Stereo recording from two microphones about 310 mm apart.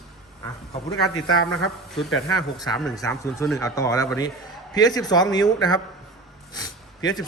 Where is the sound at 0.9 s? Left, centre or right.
Left.